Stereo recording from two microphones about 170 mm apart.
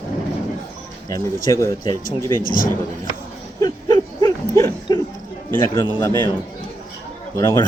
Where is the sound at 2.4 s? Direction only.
55° left (ahead or behind).